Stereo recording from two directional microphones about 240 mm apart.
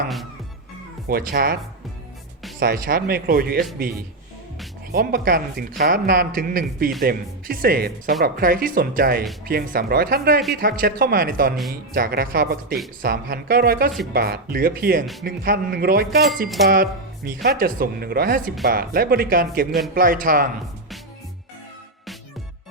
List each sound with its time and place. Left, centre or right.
1.0 s speech: right
2.6 s speech: right
4.9 s speech: right